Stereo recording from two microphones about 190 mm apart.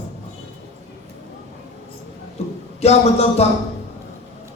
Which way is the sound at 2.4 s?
35° left (ahead or behind).